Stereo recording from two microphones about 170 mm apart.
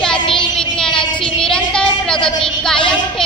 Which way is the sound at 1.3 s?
5° left (ahead or behind).